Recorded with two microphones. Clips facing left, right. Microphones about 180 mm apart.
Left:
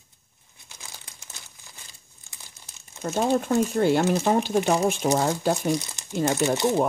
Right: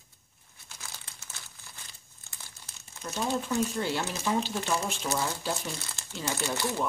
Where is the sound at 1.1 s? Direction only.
15° left (ahead or behind).